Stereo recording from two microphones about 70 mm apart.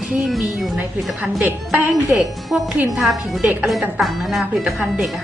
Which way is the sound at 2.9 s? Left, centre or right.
Centre.